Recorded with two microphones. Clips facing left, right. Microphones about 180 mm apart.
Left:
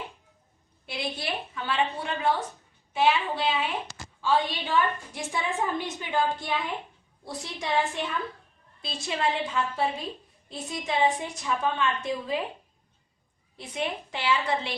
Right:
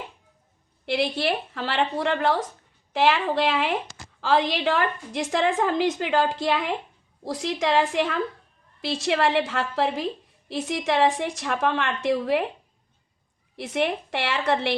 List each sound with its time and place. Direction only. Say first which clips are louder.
0.9 s a woman's voice: right 9 dB; 75° right (ahead or behind)
4.2 s a woman's voice: right 4 dB; 90° right; by 12.5 s 70° right (ahead or behind)
13.6 s a woman's voice: right 7 dB; 75° right (ahead or behind)